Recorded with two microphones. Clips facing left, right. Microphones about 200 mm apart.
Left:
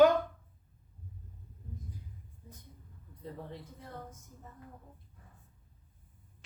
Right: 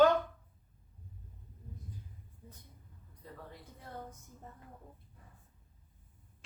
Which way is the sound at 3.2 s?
25° left (ahead or behind).